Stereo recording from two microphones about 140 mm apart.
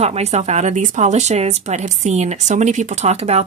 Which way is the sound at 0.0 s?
50° right (ahead or behind).